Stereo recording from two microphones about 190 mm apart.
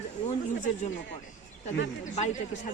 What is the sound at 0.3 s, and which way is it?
Speech, 40° left (ahead or behind).